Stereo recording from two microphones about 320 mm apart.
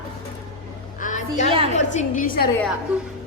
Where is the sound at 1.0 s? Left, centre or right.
Left.